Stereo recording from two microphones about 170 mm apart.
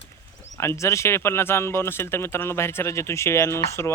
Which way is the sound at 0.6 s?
15° left (ahead or behind).